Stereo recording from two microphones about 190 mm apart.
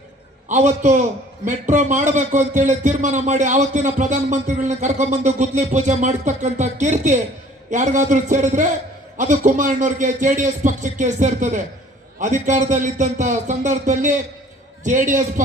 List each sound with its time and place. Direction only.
0.4 s a man's voice: 40° right (ahead or behind)